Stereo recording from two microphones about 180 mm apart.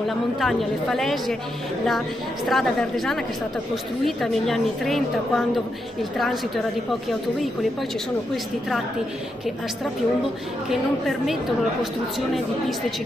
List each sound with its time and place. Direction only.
0.4 s a woman's voice: centre (ahead or behind)
10.7 s a woman's voice: centre (ahead or behind)